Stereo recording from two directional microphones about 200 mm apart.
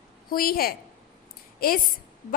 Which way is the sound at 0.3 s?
45° left (ahead or behind).